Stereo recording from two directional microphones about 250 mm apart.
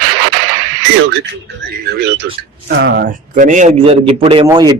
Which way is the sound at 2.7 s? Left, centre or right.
Right.